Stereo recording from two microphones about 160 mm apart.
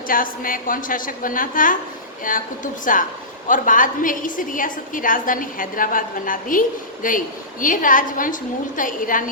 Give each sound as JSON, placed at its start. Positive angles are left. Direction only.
{"t": 0.1, "sound": "a woman's voice", "side_deg": 60}